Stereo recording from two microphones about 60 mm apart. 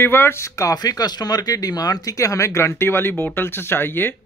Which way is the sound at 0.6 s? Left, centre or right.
Left.